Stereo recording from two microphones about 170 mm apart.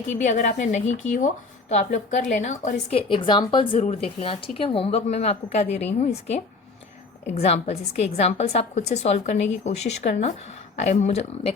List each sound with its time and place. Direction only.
0.1 s a woman's voice: 45° left (ahead or behind)
3.1 s speech: 30° left (ahead or behind)